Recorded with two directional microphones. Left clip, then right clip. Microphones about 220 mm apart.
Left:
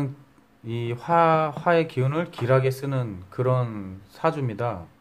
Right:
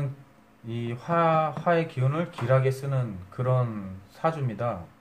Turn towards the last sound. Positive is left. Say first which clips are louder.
# left 3 dB
turn(degrees=45)  # may be behind; listen again after turning